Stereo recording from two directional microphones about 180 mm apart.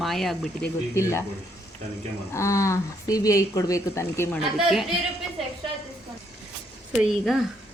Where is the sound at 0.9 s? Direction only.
15° left (ahead or behind).